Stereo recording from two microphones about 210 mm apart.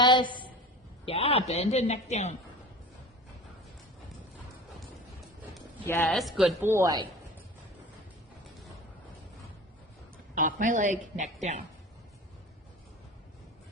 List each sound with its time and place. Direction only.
0.0 s a sound: 20° left (ahead or behind)
1.0 s a man's voice: 25° left (ahead or behind)
5.5 s speech: 10° left (ahead or behind); by 7.1 s 20° right (ahead or behind)
10.3 s a woman's voice: 40° right (ahead or behind)